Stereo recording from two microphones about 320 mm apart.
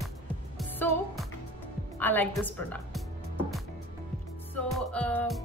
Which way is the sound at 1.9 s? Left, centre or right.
Centre.